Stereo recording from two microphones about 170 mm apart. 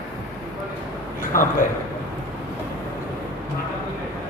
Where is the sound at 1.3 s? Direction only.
55° left (ahead or behind).